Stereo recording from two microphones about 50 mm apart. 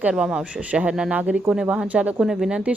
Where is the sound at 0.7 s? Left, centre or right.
Right.